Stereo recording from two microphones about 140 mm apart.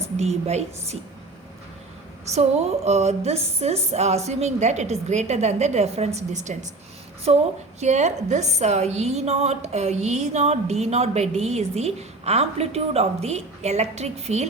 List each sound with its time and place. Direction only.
0.2 s a woman's voice: 50° right (ahead or behind)
2.3 s a woman's voice: 50° right (ahead or behind)
7.3 s a woman's voice: 45° right (ahead or behind)